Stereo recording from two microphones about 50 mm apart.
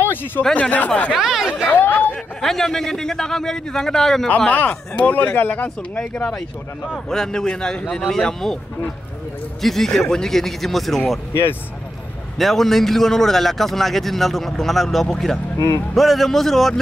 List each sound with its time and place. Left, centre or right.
0.0 s a sound: left
0.6 s speech: left
1.1 s a man's voice: centre
1.8 s speech: left
2.4 s a man's voice: centre
4.5 s speech: left
7.1 s a man's voice: centre
9.6 s a man's voice: centre
12.4 s a man's voice: centre